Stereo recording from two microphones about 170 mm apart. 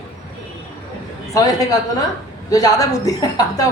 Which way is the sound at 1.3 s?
20° left (ahead or behind).